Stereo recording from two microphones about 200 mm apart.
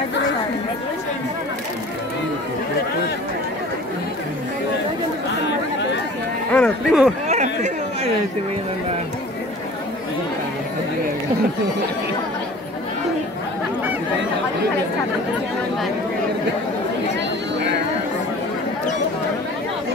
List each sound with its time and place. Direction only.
6.5 s speech: centre (ahead or behind)
7.2 s chatter: 35° right (ahead or behind)